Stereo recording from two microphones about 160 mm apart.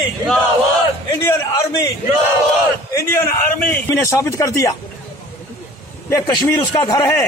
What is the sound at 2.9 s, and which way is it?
A man's voice, 15° left (ahead or behind).